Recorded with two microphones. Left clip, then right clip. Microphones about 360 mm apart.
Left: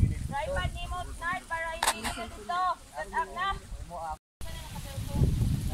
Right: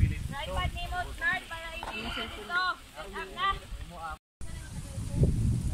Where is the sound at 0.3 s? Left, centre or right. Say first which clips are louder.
Left 3 dB; left.